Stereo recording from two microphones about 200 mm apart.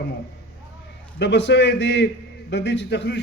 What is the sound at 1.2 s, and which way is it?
A man's voice, 60° left (ahead or behind).